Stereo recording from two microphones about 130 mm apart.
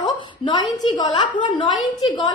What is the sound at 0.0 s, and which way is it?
A woman's voice, 35° left (ahead or behind).